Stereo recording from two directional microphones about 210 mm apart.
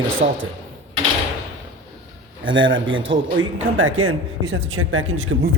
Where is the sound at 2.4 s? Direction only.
65° right (ahead or behind).